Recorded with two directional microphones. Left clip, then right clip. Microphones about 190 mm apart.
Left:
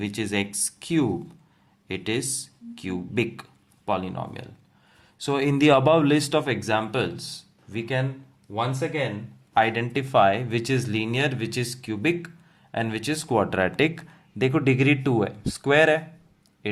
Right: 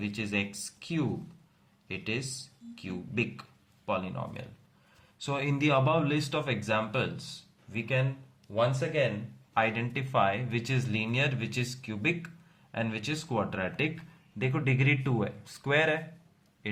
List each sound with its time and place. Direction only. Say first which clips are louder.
0.0 s speech: left 6 dB; 45° left (ahead or behind)
9.6 s speech: left 7 dB; 40° left (ahead or behind)